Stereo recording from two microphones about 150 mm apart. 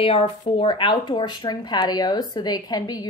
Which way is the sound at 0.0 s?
40° left (ahead or behind).